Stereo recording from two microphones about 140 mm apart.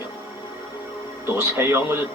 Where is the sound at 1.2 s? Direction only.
15° right (ahead or behind).